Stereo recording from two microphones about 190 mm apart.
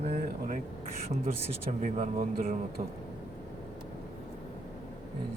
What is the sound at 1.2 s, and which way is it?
A man's voice, 35° right (ahead or behind).